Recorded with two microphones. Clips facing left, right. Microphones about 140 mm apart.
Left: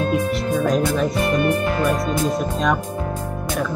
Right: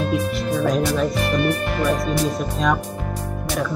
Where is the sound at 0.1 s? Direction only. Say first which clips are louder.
Left 1 dB; centre (ahead or behind).